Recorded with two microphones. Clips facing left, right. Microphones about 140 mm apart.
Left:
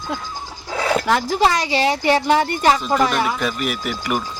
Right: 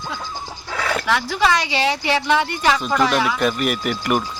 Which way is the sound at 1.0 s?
40° left (ahead or behind).